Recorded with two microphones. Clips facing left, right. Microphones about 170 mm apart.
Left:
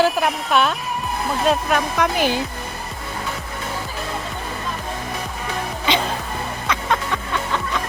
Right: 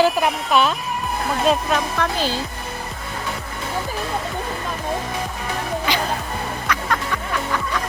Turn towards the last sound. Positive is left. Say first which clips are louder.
# left 1 dB
turn(degrees=20)  # may be behind; listen again after turning